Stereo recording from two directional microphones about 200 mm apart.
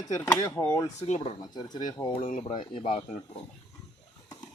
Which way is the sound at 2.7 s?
30° left (ahead or behind).